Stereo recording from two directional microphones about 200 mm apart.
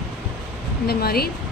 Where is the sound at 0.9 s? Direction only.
50° left (ahead or behind).